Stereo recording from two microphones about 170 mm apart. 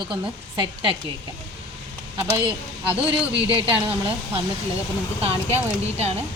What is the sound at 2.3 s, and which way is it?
Speech, 25° right (ahead or behind).